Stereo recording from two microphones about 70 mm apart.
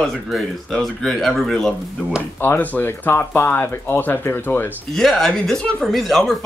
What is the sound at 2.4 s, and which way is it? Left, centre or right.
Speech, left.